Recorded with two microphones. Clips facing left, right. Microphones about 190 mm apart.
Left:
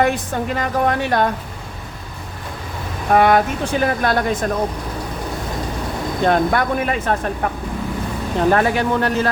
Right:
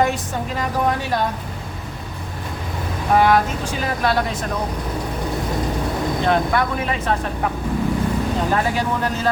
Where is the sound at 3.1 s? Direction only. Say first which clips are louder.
Left 2 dB; 60° left (ahead or behind).